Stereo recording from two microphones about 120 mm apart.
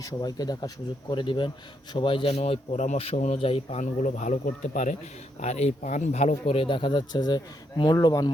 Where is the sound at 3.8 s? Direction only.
90° left.